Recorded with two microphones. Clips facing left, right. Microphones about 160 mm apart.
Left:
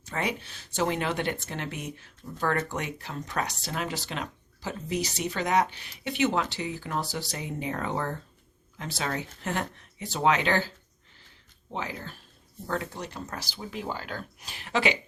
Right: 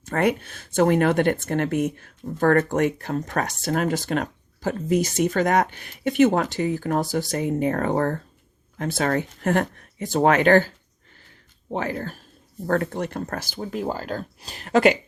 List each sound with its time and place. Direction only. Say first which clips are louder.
0.0 s speech: right 9 dB; 55° right (ahead or behind)
11.7 s speech: right 8 dB; 55° right (ahead or behind)